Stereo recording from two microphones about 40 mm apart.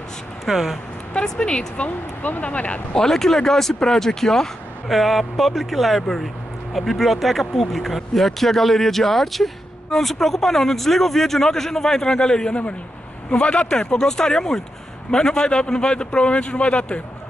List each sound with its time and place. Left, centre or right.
0.5 s speech: centre
1.1 s a man's voice: centre
1.9 s speech: left
2.9 s speech: centre
4.8 s a man's voice: centre; by 17.0 s left